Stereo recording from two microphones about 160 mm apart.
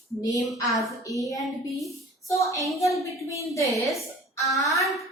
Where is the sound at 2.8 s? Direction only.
20° left (ahead or behind).